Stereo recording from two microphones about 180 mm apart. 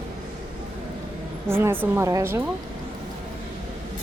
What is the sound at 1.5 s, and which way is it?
Speech, 15° right (ahead or behind).